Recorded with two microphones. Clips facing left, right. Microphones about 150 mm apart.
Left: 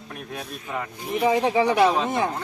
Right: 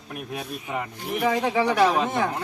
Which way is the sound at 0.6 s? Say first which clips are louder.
Left 1 dB; 15° right (ahead or behind).